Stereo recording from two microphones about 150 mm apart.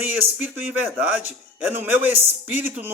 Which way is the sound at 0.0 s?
10° right (ahead or behind).